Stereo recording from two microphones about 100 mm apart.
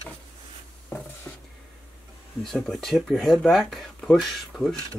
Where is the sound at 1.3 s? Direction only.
15° left (ahead or behind).